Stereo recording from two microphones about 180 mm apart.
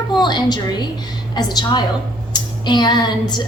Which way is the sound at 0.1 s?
25° left (ahead or behind).